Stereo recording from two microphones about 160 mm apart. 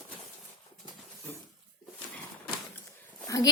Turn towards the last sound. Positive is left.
turn(degrees=20)  # may be behind; listen again after turning